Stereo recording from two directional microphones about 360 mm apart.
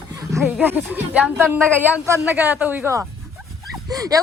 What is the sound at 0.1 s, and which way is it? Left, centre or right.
A woman's voice, centre.